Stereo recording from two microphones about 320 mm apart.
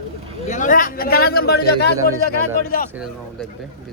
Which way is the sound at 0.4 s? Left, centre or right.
Left.